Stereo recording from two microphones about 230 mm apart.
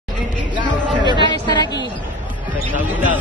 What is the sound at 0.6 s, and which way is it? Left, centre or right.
Chatter, centre.